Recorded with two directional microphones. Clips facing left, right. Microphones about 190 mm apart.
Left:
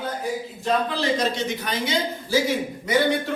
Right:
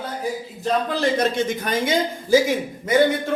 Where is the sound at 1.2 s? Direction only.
50° right (ahead or behind).